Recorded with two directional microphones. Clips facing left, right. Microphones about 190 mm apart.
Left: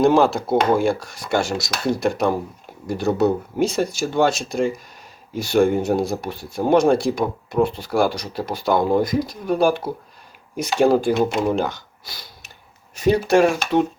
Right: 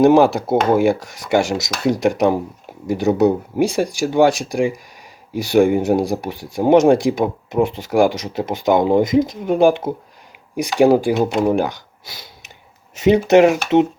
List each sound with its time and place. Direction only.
0.0 s speech: 15° right (ahead or behind)
13.0 s speech: 20° right (ahead or behind)